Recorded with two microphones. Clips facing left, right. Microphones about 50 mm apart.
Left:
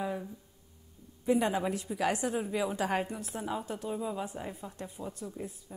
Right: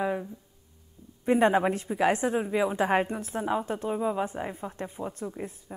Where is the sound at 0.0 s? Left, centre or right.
Right.